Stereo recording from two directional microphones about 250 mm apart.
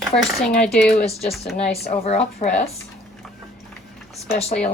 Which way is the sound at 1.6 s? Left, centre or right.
Left.